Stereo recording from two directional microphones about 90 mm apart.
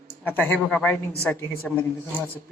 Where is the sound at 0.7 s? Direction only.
15° left (ahead or behind).